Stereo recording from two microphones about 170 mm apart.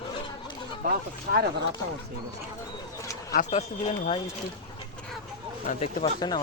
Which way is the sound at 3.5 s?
40° left (ahead or behind).